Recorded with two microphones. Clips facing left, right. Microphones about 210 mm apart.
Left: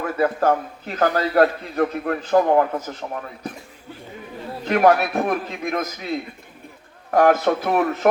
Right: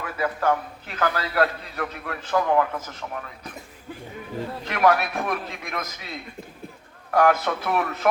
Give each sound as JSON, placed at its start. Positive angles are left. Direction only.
{"t": 0.0, "sound": "a man's voice", "side_deg": 45}
{"t": 4.6, "sound": "a man's voice", "side_deg": 40}